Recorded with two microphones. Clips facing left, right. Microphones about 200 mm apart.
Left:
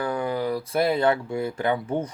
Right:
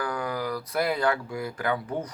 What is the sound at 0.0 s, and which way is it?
Speech, 25° left (ahead or behind).